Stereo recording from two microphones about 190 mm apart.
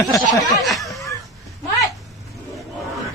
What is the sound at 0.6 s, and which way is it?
Snicker, centre (ahead or behind).